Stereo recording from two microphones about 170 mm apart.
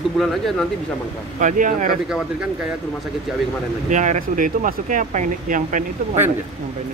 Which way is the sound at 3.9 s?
45° right (ahead or behind).